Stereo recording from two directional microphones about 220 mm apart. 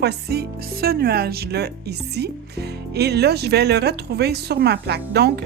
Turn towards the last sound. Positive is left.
turn(degrees=-50)  # may be behind; listen again after turning